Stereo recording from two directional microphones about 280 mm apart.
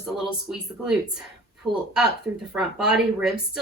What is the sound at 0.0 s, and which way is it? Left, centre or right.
Speech, centre.